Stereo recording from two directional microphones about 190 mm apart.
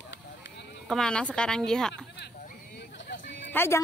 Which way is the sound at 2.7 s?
70° left (ahead or behind).